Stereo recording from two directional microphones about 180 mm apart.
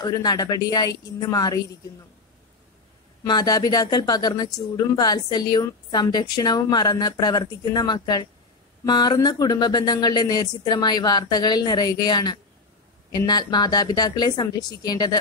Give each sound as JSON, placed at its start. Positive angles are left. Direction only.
{"t": 0.0, "sound": "speech", "side_deg": 20}
{"t": 3.3, "sound": "speech", "side_deg": 25}